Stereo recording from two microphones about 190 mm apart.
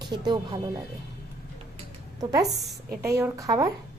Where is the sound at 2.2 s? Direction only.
20° right (ahead or behind).